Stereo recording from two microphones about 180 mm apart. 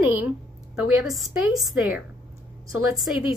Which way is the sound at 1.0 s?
Centre (ahead or behind).